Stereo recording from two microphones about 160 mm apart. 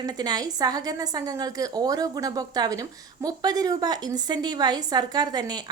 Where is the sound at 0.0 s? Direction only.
25° right (ahead or behind).